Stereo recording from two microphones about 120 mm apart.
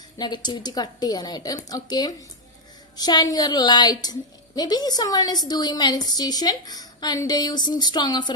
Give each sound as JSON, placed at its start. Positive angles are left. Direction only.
{"t": 0.2, "sound": "a woman's voice", "side_deg": 35}